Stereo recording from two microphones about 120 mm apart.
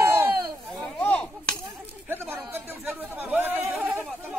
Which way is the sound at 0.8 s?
10° left (ahead or behind).